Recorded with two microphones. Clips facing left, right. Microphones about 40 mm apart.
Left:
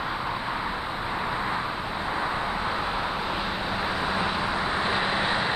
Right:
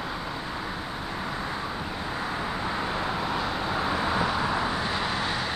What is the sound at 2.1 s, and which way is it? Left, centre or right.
Vehicle, left.